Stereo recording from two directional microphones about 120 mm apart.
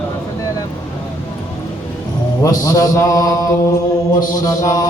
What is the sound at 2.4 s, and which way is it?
Mantra, 30° left (ahead or behind).